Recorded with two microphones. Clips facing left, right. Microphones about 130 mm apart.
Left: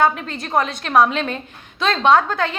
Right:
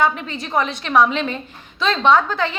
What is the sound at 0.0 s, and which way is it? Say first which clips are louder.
A woman's voice: left 1 dB; 50° left (ahead or behind).